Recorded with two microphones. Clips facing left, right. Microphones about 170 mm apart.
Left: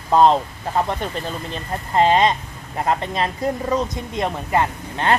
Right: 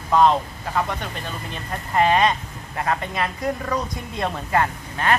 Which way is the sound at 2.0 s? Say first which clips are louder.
Left 2 dB; 25° left (ahead or behind).